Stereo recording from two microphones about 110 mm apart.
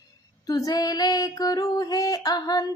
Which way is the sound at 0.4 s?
35° left (ahead or behind).